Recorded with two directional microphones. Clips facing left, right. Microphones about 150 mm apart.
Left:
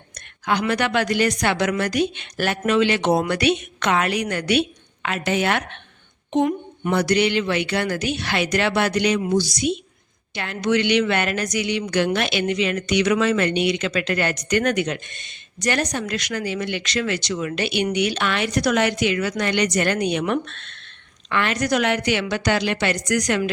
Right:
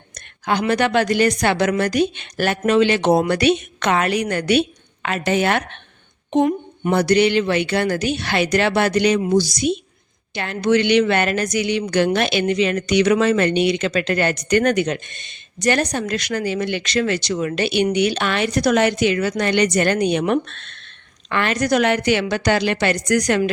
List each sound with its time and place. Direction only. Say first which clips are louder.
0.4 s a woman's voice: right 3 dB; 30° right (ahead or behind)